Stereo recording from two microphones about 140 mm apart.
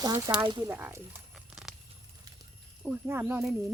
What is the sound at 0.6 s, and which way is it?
Speech, 20° right (ahead or behind).